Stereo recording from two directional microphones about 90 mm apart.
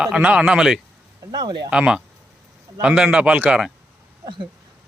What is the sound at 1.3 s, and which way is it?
Speech, 50° right (ahead or behind).